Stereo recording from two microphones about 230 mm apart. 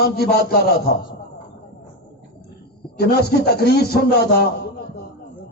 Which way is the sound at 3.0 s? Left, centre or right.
Left.